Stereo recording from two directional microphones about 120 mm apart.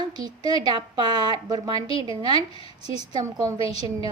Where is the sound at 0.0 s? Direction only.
35° right (ahead or behind).